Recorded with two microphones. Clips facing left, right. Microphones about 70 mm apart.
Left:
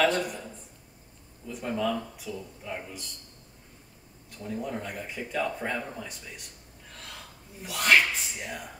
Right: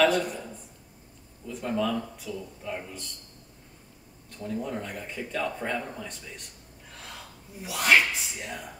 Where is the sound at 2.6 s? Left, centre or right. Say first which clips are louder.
Right 2 dB; centre.